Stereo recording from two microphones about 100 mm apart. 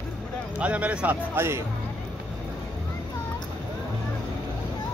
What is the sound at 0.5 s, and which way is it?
Speech, 15° right (ahead or behind).